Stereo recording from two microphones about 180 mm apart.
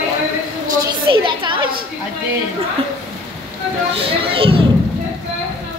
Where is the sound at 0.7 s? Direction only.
25° right (ahead or behind).